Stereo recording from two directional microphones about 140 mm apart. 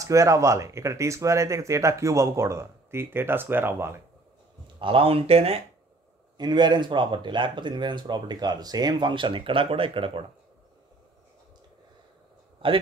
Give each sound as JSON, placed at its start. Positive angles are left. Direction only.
{"t": 0.0, "sound": "speech", "side_deg": -20}
{"t": 4.7, "sound": "speech", "side_deg": -40}
{"t": 6.3, "sound": "speech", "side_deg": -30}